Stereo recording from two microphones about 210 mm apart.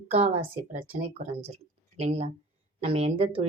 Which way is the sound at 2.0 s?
30° right (ahead or behind).